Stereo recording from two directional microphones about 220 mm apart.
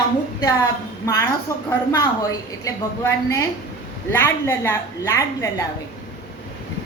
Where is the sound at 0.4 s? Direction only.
15° left (ahead or behind).